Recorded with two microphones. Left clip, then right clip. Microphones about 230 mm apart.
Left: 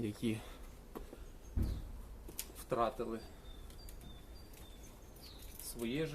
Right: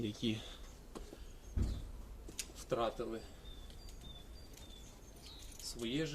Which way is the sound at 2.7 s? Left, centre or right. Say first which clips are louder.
Left 2 dB; centre.